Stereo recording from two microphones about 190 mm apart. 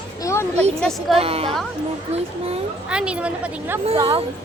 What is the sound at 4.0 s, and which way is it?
Speech, 25° right (ahead or behind).